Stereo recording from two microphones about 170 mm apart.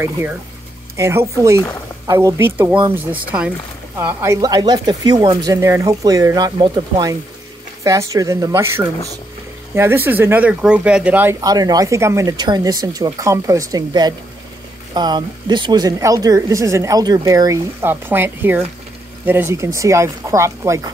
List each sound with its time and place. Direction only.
0.0 s speech: 15° right (ahead or behind)
11.4 s speech: 20° right (ahead or behind)